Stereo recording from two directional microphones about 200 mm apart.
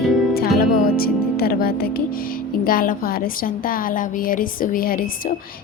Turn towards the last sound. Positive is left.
turn(degrees=45)  # may be behind; listen again after turning